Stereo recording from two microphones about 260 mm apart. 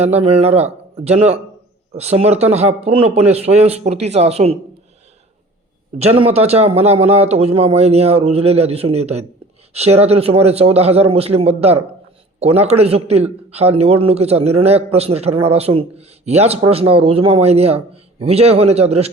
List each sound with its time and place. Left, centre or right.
0.0 s a man's voice: right
6.3 s a man's voice: right